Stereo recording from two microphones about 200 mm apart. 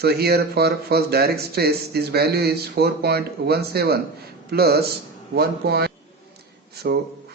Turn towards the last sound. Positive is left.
turn(degrees=-55)  # may be behind; listen again after turning